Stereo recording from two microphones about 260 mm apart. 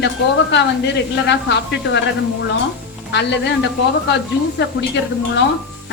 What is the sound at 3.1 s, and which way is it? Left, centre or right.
Speech, left.